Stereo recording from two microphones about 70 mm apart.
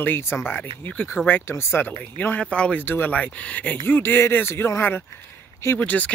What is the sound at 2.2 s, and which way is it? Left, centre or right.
Speech, centre.